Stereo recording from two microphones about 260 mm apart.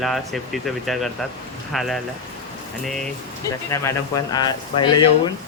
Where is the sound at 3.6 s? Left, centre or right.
Centre.